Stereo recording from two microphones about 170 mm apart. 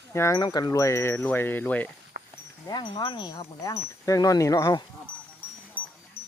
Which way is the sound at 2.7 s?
25° left (ahead or behind).